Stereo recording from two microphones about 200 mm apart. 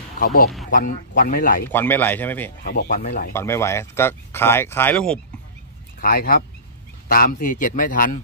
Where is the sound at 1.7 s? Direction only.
10° left (ahead or behind).